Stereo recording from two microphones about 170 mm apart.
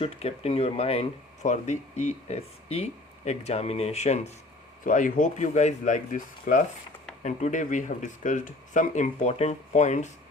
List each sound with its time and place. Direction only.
0.0 s speech: 35° left (ahead or behind)